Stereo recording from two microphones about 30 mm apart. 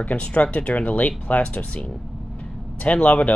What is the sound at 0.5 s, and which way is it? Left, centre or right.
Speech, left.